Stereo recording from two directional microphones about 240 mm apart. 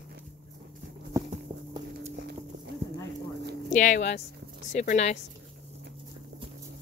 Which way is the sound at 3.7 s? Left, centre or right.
Left.